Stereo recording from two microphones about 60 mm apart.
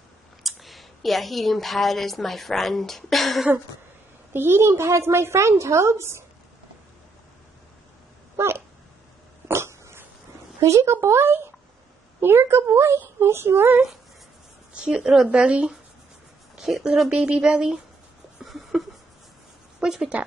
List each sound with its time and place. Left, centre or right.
0.4 s a woman's voice: centre
4.3 s a woman's voice: right
8.4 s a sound: right
9.5 s cough: right
10.6 s a woman's voice: right
14.7 s speech: centre
16.8 s speech: centre
18.4 s a sound: centre
19.8 s speech: centre